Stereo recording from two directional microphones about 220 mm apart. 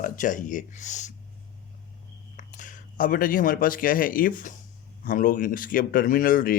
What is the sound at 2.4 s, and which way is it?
Speech, 35° left (ahead or behind).